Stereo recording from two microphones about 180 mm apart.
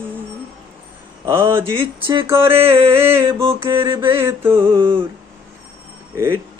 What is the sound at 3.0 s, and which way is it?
Mantra, 15° right (ahead or behind).